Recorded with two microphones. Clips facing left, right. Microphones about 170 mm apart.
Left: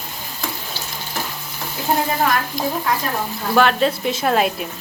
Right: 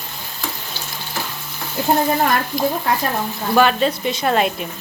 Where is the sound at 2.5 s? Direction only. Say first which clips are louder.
Right 2 dB; 5° right (ahead or behind).